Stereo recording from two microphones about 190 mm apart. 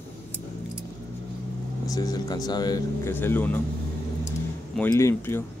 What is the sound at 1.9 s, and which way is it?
Speech, 20° left (ahead or behind).